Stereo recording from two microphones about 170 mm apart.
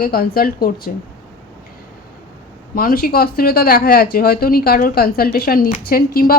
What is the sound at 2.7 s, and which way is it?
Speech, 60° left (ahead or behind).